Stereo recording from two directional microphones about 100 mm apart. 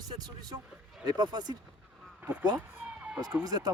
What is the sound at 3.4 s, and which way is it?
Speech, 40° right (ahead or behind).